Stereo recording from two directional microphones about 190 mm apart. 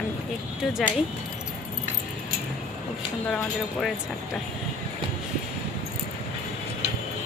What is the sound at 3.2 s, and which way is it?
Speech, centre (ahead or behind).